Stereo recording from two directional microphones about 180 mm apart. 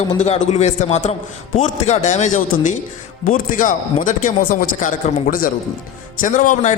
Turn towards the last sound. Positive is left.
turn(degrees=45)  # may be behind; listen again after turning